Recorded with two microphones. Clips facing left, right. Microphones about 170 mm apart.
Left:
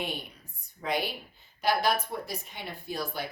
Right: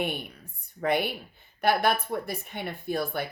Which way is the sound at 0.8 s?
60° right (ahead or behind).